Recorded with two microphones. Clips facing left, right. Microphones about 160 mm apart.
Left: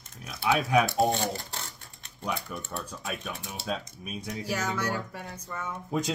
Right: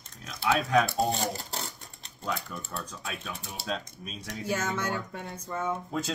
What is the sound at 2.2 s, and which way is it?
Speech, 25° left (ahead or behind).